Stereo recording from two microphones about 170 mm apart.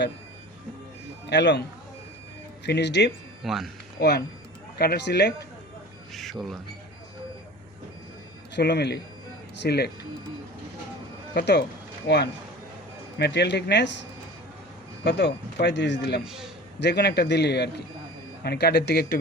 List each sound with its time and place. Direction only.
1.3 s speech: 90° left
2.6 s speech: 85° left
3.4 s speech: centre (ahead or behind)
4.0 s a man's voice: 70° left (ahead or behind)
6.1 s speech: centre (ahead or behind)
8.5 s a man's voice: 75° left (ahead or behind)
11.3 s a man's voice: 70° left (ahead or behind)
15.0 s speech: 80° left
16.2 s speech: 5° right (ahead or behind)
16.8 s a man's voice: 75° left (ahead or behind)